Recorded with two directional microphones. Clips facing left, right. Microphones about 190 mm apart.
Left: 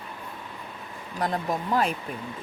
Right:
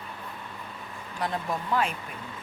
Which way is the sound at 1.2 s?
45° left (ahead or behind).